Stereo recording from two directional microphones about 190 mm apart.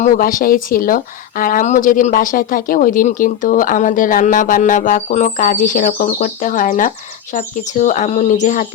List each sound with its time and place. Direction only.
0.0 s speech: 45° left (ahead or behind)